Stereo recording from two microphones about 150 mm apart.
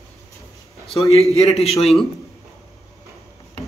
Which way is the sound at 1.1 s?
45° left (ahead or behind).